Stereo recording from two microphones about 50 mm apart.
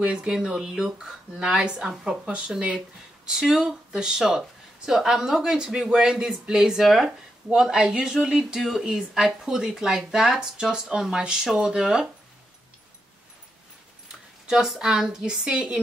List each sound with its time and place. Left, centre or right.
0.0 s speech: right
0.3 s speech: centre
6.8 s speech: centre
8.5 s speech: centre
14.5 s speech: centre